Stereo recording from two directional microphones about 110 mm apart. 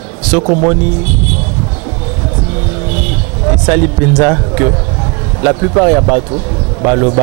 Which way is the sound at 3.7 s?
20° right (ahead or behind).